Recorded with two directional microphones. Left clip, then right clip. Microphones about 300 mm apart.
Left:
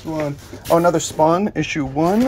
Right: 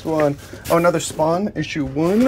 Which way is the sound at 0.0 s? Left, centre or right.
Centre.